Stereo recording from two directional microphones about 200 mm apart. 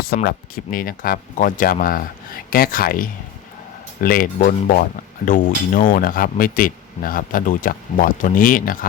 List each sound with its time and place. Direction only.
0.0 s speech: 50° left (ahead or behind)